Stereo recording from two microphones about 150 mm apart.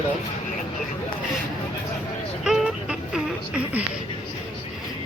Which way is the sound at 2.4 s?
5° right (ahead or behind).